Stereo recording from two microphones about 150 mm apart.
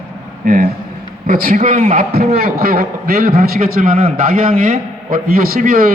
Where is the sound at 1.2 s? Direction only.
70° right (ahead or behind); by 2.1 s 55° right (ahead or behind).